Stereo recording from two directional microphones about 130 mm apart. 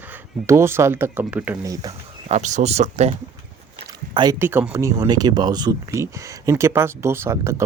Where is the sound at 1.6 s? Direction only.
25° right (ahead or behind).